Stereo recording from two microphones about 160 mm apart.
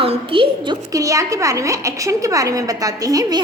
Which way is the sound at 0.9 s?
20° right (ahead or behind).